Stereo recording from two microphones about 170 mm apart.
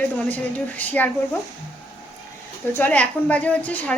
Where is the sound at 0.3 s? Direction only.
10° left (ahead or behind).